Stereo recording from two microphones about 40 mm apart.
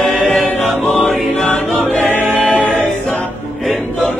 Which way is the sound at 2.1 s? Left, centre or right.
Right.